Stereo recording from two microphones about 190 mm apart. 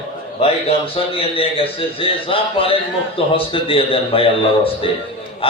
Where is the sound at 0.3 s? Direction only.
30° left (ahead or behind).